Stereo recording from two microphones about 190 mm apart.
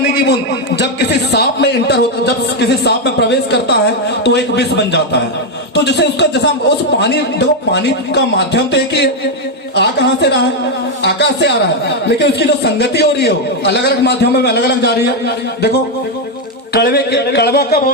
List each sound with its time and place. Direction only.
0.8 s a man's voice: 65° left (ahead or behind)
16.7 s a man's voice: 60° left (ahead or behind)